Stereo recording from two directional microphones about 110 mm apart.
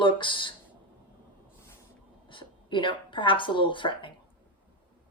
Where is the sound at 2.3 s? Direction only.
50° left (ahead or behind).